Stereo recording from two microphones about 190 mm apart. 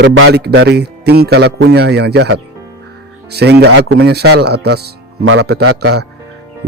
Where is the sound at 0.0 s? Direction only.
65° right (ahead or behind).